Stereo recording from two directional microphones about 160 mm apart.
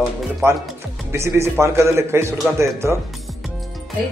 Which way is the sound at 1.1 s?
15° right (ahead or behind).